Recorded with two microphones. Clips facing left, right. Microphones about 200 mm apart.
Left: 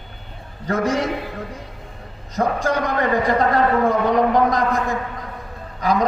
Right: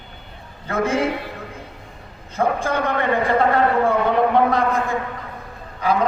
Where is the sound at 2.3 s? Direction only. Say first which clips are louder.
Even; 40° left (ahead or behind).